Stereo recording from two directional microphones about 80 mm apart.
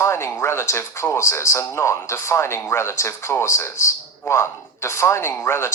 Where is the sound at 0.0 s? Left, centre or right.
Left.